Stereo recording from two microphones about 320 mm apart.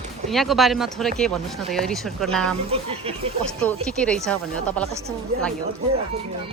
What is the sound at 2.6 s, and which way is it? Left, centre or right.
Speech, centre.